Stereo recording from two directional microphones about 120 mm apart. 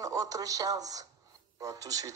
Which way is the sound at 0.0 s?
30° right (ahead or behind).